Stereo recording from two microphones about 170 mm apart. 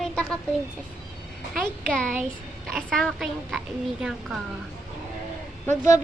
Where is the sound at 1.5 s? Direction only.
5° left (ahead or behind).